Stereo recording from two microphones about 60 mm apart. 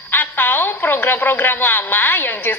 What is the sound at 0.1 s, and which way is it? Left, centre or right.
A woman's voice, left.